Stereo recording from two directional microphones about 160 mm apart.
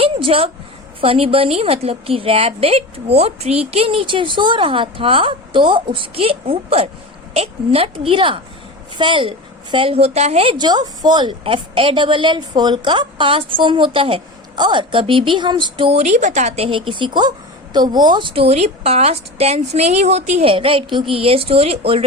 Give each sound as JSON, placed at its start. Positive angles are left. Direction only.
{"t": 0.0, "sound": "a woman's voice", "side_deg": -35}